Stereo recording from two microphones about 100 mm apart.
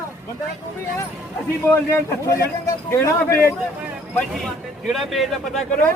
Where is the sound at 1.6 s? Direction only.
20° left (ahead or behind).